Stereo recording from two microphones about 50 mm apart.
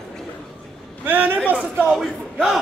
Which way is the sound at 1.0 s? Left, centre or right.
Right.